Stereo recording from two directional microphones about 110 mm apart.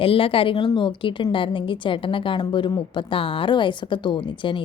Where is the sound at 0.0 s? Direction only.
55° left (ahead or behind).